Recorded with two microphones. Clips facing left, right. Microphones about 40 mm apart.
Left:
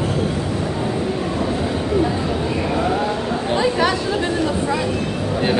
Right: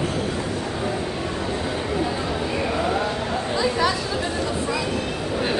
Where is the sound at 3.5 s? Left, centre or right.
Left.